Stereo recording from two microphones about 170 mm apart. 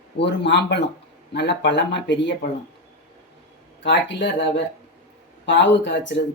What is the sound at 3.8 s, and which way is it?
Speech, 90° left.